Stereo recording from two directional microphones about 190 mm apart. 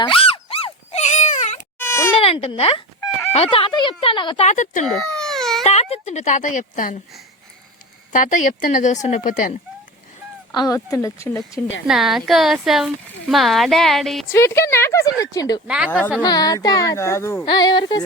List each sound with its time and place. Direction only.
0.0 s a sound: 30° left (ahead or behind)
1.8 s a sound: 15° left (ahead or behind)
2.2 s speech: 30° left (ahead or behind)
4.4 s speech: 40° left (ahead or behind)
4.9 s baby cry: centre (ahead or behind)
5.6 s speech: 35° left (ahead or behind)
8.1 s speech: 45° left (ahead or behind)
10.5 s a woman's voice: 20° left (ahead or behind)
11.9 s speech: centre (ahead or behind)
14.3 s a woman's voice: 15° left (ahead or behind)
15.6 s speech: 5° right (ahead or behind)
16.2 s a woman's voice: 20° left (ahead or behind)